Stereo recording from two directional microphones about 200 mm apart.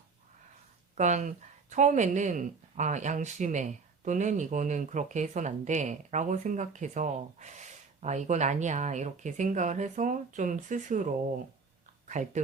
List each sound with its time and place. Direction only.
0.9 s speech: 35° right (ahead or behind)